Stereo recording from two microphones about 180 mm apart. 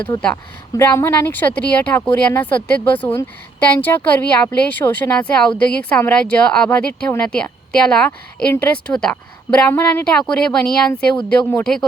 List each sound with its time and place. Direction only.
0.1 s a woman's voice: 20° left (ahead or behind); by 11.9 s 5° left (ahead or behind)